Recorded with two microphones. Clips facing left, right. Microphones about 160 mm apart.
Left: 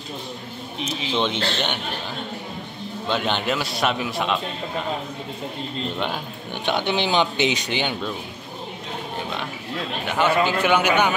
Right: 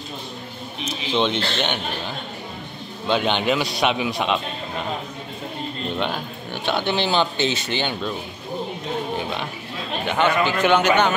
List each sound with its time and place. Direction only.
1.1 s speech: 5° left (ahead or behind)
3.4 s speech: centre (ahead or behind)
5.9 s speech: 10° left (ahead or behind)
6.5 s speech: 20° left (ahead or behind)
10.0 s speech: 5° left (ahead or behind)